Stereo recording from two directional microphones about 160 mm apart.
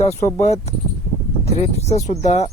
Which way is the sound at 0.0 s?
45° left (ahead or behind).